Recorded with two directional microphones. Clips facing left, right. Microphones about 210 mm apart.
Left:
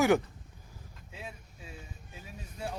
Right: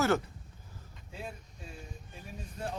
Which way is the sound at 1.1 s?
5° left (ahead or behind).